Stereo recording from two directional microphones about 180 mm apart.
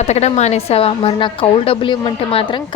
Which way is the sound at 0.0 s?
35° left (ahead or behind).